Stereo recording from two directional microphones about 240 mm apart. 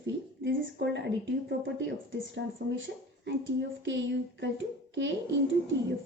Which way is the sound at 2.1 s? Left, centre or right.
Right.